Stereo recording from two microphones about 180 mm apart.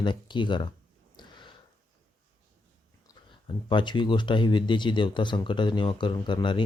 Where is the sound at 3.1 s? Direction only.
20° left (ahead or behind).